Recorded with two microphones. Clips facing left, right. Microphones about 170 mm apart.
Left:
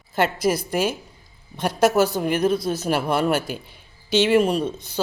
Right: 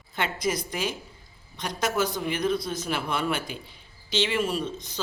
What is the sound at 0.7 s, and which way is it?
Speech, 55° left (ahead or behind).